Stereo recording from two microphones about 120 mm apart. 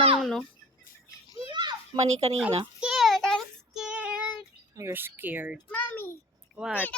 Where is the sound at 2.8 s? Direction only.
5° right (ahead or behind).